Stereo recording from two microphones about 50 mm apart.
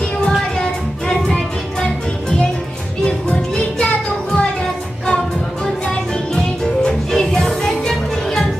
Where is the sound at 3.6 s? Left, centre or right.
Centre.